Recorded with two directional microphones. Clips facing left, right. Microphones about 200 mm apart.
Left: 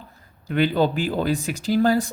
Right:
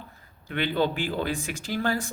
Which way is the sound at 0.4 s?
40° left (ahead or behind).